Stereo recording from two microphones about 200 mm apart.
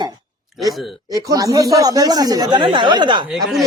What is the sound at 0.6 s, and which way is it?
Speech, centre (ahead or behind).